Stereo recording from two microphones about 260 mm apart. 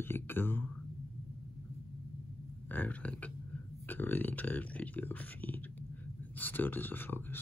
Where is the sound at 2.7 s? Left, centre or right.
Centre.